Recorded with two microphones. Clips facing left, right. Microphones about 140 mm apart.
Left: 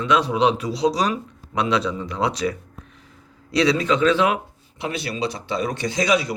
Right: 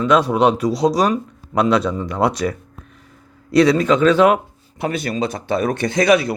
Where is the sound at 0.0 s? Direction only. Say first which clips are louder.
Right 4 dB; 45° right (ahead or behind).